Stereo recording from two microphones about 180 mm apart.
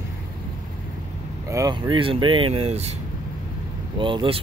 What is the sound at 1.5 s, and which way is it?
Speech, 20° right (ahead or behind).